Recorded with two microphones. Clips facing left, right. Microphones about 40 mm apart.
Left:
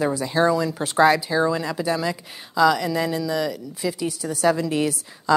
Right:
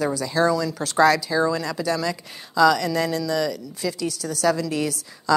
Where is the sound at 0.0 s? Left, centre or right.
Left.